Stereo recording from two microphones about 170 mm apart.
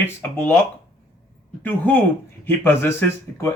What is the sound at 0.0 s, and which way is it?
Speech, 10° left (ahead or behind).